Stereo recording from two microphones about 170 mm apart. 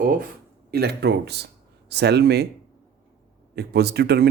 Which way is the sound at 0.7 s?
70° right (ahead or behind).